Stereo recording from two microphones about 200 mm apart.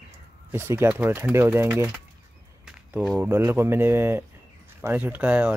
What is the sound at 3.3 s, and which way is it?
Speech, 10° right (ahead or behind).